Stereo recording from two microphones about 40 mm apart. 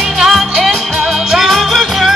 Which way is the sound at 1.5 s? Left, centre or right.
Centre.